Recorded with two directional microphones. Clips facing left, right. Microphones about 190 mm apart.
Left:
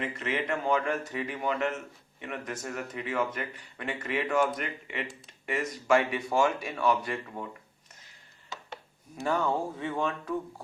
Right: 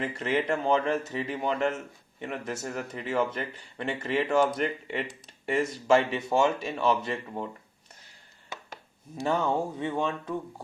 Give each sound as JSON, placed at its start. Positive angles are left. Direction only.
{"t": 0.0, "sound": "speech", "side_deg": -35}
{"t": 9.2, "sound": "speech", "side_deg": -20}